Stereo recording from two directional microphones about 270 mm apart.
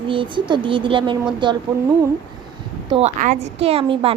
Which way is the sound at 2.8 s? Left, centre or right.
Right.